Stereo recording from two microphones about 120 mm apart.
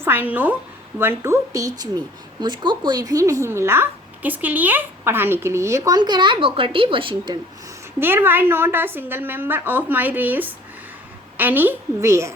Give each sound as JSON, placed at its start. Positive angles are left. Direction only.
{"t": 0.0, "sound": "a woman's voice", "side_deg": -15}
{"t": 7.9, "sound": "a woman's voice", "side_deg": -20}